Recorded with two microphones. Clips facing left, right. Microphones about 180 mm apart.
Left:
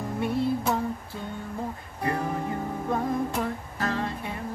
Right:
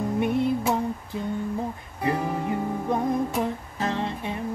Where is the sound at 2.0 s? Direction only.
15° right (ahead or behind).